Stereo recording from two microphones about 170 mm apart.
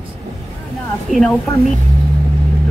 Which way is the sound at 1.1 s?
5° right (ahead or behind).